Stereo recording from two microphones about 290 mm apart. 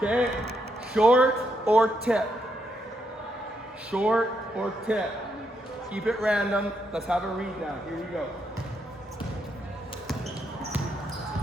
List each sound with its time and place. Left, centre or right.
0.0 s a man's voice: centre
3.9 s a man's voice: centre